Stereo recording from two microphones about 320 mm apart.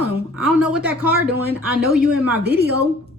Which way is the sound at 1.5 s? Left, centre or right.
Centre.